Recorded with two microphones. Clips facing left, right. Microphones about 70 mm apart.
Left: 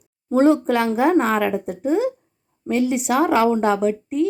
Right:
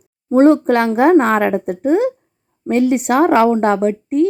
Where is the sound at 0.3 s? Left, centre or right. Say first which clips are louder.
Right 5 dB; right.